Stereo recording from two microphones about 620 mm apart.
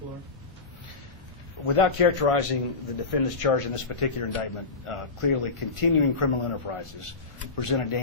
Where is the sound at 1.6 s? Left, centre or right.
Left.